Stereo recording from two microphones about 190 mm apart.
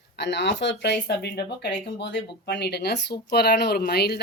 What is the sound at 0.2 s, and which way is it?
Speech, 65° left (ahead or behind).